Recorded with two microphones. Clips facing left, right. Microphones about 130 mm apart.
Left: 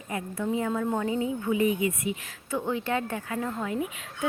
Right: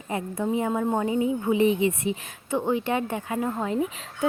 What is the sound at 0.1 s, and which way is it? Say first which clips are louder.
A woman's voice: right 3 dB; 25° right (ahead or behind).